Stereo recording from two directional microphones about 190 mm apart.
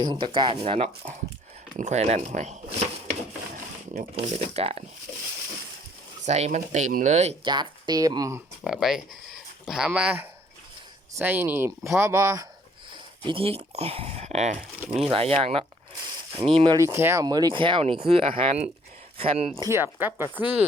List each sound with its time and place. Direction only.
0.0 s speech: 25° right (ahead or behind)
3.9 s speech: 35° right (ahead or behind)
6.2 s speech: 35° right (ahead or behind)
7.4 s speech: 25° right (ahead or behind)
8.6 s speech: centre (ahead or behind); by 16.7 s 25° right (ahead or behind)
16.7 s speech: 15° right (ahead or behind); by 19.5 s 30° right (ahead or behind)
19.5 s speech: 15° right (ahead or behind)